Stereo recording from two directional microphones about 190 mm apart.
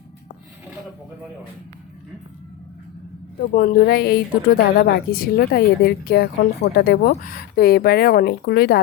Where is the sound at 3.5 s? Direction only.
45° left (ahead or behind).